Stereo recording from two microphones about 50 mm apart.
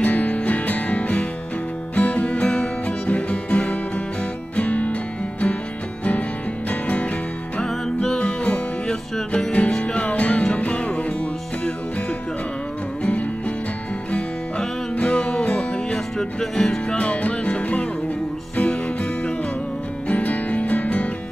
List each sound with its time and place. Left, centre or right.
0.0 s music: left
6.7 s music: left
7.6 s music: centre
13.0 s music: left
15.0 s music: left
16.2 s music: centre
16.9 s music: left
20.1 s music: left